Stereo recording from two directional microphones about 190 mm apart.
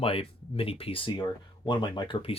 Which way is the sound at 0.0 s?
30° left (ahead or behind).